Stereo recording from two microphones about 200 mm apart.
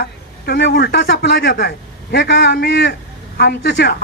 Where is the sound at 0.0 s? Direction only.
55° left (ahead or behind).